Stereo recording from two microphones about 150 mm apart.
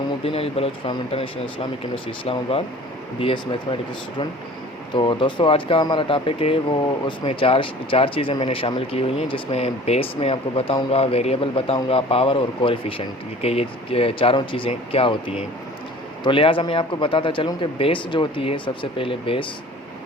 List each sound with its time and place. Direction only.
0.3 s speech: 40° left (ahead or behind)
4.9 s speech: 30° left (ahead or behind)